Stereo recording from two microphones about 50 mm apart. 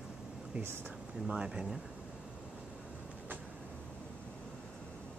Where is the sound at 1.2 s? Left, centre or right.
Centre.